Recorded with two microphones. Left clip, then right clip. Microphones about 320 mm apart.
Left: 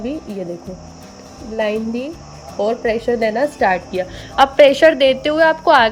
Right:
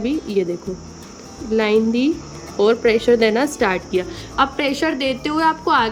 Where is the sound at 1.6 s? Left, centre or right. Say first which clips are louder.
Right 2 dB; centre.